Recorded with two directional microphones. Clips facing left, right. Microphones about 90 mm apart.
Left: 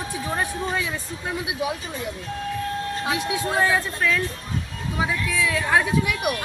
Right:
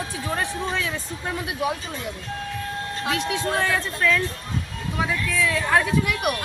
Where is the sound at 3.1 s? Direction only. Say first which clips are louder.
Even; 10° left (ahead or behind).